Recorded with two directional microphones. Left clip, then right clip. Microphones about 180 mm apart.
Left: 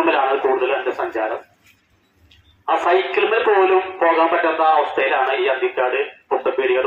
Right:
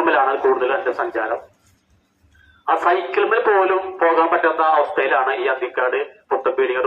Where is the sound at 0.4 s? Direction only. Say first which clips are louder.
Right 1 dB; 25° left (ahead or behind).